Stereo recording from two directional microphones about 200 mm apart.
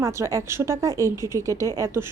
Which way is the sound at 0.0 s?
15° right (ahead or behind).